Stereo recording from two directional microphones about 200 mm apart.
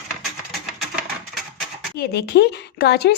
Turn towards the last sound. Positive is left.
turn(degrees=55)  # may be behind; listen again after turning